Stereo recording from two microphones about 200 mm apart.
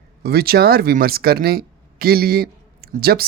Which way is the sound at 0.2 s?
50° right (ahead or behind).